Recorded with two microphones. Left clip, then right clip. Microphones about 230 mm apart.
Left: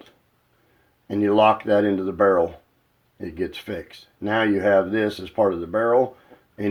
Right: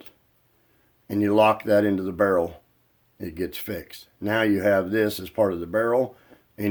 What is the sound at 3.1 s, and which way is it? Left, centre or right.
Speech, right.